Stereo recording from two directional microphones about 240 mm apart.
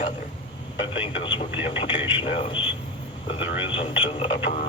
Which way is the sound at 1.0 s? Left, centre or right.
Left.